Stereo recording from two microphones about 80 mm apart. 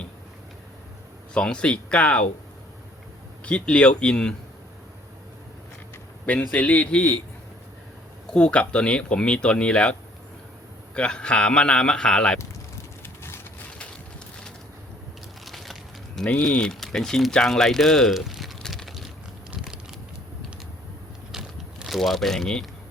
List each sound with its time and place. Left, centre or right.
1.3 s speech: centre
3.4 s speech: centre
6.4 s speech: centre
8.3 s speech: centre
13.0 s vehicle: left
15.4 s a sound: centre
16.4 s speech: centre
19.5 s a sound: centre
21.3 s a sound: centre
21.8 s speech: centre